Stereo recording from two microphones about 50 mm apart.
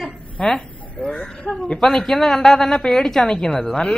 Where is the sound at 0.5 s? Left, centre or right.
Centre.